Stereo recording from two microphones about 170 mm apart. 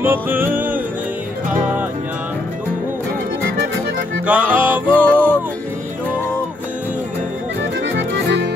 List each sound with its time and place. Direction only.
0.0 s music: 10° right (ahead or behind)
4.3 s music: 10° right (ahead or behind)
4.9 s music: 10° left (ahead or behind)
7.9 s music: 90° right